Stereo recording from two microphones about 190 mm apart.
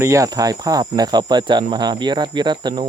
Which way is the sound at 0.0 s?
15° right (ahead or behind).